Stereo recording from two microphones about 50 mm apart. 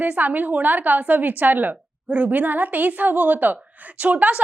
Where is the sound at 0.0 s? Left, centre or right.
Right.